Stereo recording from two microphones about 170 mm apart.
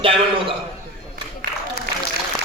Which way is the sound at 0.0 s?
30° right (ahead or behind).